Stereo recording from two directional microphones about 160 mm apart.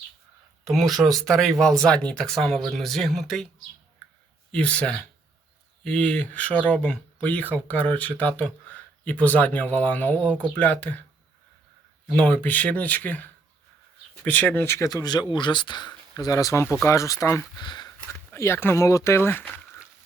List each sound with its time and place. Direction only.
0.6 s speech: centre (ahead or behind)
4.5 s speech: 5° left (ahead or behind)
12.1 s speech: 10° left (ahead or behind)